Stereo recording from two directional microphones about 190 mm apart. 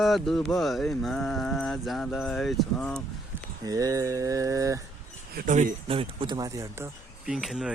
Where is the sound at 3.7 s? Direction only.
20° right (ahead or behind).